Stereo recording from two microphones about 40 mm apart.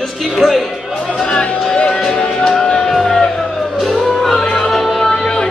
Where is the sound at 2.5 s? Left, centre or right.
Centre.